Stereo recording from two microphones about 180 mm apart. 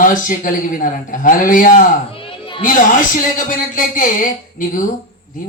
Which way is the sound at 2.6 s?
45° left (ahead or behind).